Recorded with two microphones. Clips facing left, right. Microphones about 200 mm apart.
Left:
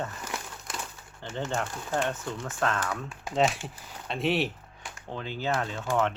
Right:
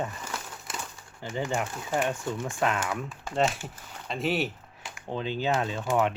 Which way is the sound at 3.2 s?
Centre (ahead or behind).